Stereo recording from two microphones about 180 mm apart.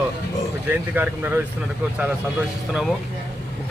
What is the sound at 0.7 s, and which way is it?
Speech, 10° right (ahead or behind).